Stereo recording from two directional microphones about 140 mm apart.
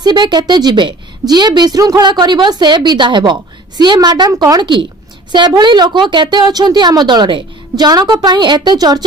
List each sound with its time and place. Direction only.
0.0 s a woman's voice: 30° right (ahead or behind)